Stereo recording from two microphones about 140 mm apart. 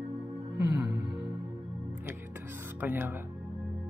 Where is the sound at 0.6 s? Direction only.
20° right (ahead or behind).